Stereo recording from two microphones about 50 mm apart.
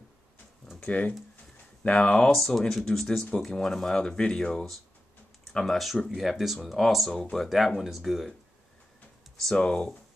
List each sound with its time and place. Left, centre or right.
0.7 s speech: left
2.3 s speech: centre
3.1 s speech: left
6.0 s speech: centre
9.6 s speech: centre